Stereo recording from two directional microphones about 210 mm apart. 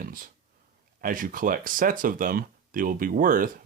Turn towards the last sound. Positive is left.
turn(degrees=-40)  # may be behind; listen again after turning